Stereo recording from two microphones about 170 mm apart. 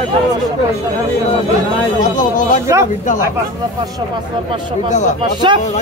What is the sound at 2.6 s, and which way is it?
Speech, 15° right (ahead or behind).